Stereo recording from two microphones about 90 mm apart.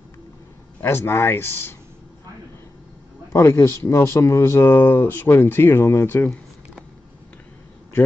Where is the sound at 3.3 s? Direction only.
25° left (ahead or behind).